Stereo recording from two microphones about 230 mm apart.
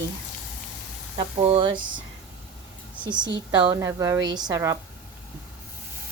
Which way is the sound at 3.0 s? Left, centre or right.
Centre.